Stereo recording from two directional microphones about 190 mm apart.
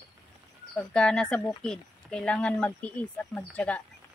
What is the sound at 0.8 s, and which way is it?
Speech, 5° left (ahead or behind).